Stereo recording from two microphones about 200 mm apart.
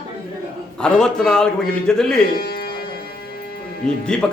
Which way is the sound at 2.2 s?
50° left (ahead or behind).